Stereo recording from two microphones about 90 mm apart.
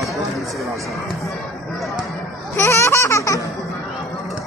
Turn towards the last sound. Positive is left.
turn(degrees=35)  # may be behind; listen again after turning